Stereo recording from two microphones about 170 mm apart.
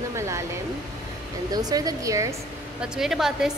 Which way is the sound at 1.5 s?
20° right (ahead or behind).